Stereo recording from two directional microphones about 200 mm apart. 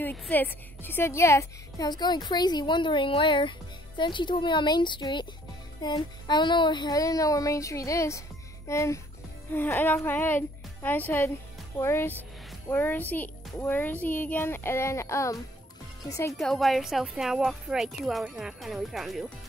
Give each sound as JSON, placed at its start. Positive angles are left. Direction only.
{"t": 0.0, "sound": "a woman's voice", "side_deg": 10}
{"t": 16.3, "sound": "speech", "side_deg": 0}